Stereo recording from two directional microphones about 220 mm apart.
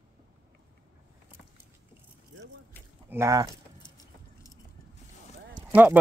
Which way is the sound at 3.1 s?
15° right (ahead or behind).